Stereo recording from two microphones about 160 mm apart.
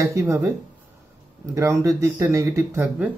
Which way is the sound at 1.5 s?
20° right (ahead or behind).